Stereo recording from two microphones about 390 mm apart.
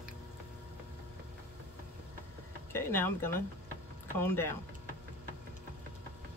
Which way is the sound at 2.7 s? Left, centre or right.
Centre.